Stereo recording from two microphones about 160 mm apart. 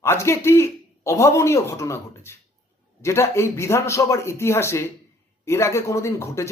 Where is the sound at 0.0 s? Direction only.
15° left (ahead or behind).